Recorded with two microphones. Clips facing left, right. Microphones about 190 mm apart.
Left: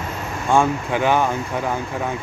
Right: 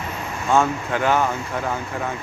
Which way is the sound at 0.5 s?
15° left (ahead or behind).